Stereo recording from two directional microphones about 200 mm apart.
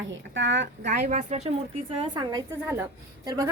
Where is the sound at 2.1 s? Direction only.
20° right (ahead or behind).